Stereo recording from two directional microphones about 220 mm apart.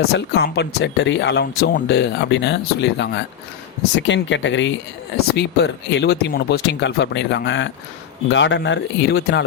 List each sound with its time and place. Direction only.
0.1 s speech: 50° left (ahead or behind)